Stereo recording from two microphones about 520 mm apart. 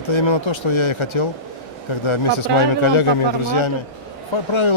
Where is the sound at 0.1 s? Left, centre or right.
Left.